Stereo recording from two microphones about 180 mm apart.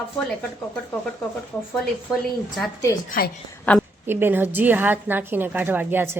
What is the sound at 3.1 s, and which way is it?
Speech, 55° left (ahead or behind).